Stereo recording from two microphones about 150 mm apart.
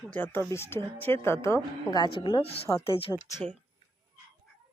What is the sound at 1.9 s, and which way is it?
A woman's voice, 30° left (ahead or behind).